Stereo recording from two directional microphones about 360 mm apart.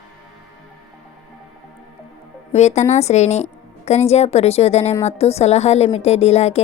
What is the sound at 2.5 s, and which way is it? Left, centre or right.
A woman's voice, centre.